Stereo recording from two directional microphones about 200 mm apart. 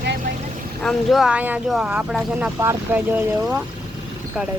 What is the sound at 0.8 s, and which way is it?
Speech, centre (ahead or behind).